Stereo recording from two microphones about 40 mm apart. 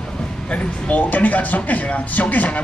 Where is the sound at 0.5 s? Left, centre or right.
Left.